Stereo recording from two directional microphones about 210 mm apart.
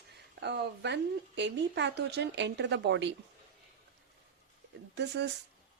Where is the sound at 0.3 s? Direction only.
55° right (ahead or behind).